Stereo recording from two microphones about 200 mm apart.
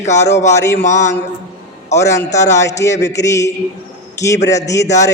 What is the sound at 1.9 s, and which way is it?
A man's voice, 15° left (ahead or behind).